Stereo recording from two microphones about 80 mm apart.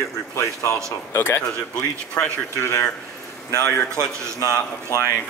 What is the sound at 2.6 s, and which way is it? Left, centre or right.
Speech, left.